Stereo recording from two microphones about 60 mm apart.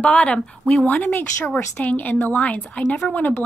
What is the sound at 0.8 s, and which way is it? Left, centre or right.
A woman's voice, left.